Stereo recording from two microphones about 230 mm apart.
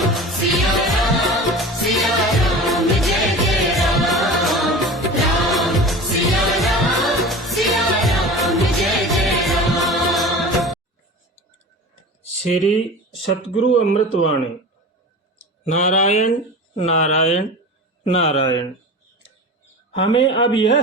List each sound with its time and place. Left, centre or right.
0.0 s music: centre
13.6 s speech: left
15.7 s speech: left
19.9 s speech: left